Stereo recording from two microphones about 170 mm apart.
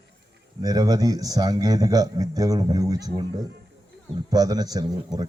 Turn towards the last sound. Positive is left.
turn(degrees=-20)  # may be behind; listen again after turning